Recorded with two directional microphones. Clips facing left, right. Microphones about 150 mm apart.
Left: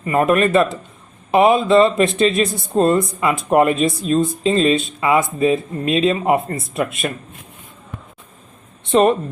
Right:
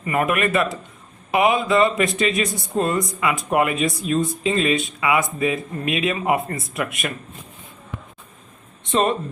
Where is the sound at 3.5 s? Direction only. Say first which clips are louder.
Left 7 dB; 40° left (ahead or behind).